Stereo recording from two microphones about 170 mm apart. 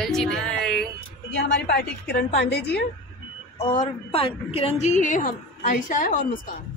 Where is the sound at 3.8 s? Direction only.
35° left (ahead or behind); by 6.4 s 50° left (ahead or behind).